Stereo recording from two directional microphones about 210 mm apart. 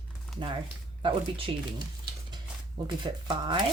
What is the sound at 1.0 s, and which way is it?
Speech, 25° right (ahead or behind).